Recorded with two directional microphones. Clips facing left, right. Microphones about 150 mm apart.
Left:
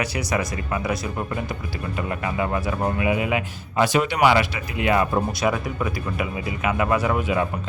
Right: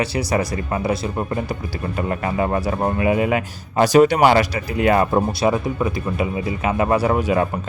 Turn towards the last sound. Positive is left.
turn(degrees=-40)  # may be behind; listen again after turning